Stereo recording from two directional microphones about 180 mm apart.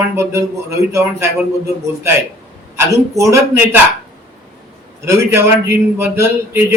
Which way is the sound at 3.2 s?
15° right (ahead or behind).